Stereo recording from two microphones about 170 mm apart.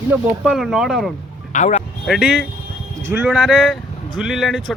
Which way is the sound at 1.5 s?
45° left (ahead or behind).